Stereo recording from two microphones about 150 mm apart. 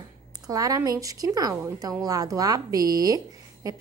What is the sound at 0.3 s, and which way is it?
A woman's voice, 25° right (ahead or behind).